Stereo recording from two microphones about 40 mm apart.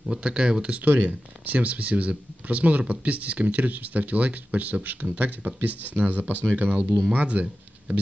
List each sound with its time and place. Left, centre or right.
0.1 s speech: right
0.8 s speech: right